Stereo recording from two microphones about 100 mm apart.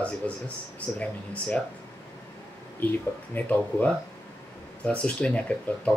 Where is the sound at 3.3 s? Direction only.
20° left (ahead or behind).